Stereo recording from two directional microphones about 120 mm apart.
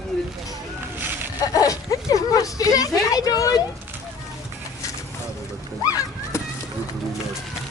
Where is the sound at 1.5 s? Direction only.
30° left (ahead or behind).